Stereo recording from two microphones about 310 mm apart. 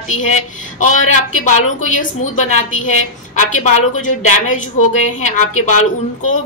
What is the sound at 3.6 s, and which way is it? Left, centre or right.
A woman's voice, left.